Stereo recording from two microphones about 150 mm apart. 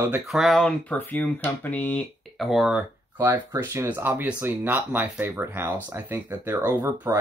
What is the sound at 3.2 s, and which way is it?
Speech, 15° right (ahead or behind).